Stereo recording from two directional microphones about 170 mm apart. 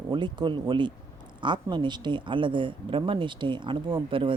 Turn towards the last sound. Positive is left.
turn(degrees=-30)  # may be behind; listen again after turning